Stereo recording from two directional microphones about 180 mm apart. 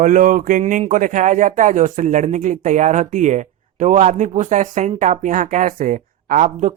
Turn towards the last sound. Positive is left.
turn(degrees=-45)  # may be behind; listen again after turning